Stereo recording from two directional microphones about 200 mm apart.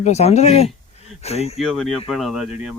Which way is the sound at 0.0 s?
35° left (ahead or behind).